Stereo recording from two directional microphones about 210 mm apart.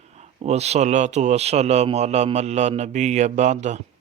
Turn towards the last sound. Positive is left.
turn(degrees=-35)  # may be behind; listen again after turning